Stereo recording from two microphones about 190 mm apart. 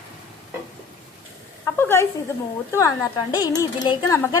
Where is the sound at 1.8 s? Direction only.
15° left (ahead or behind).